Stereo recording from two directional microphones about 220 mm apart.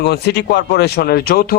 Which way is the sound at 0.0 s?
50° left (ahead or behind).